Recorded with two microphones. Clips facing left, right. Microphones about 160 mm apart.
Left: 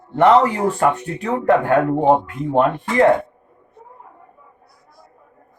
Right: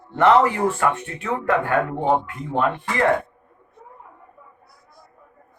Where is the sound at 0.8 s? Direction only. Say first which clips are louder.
Left 4 dB; 35° left (ahead or behind).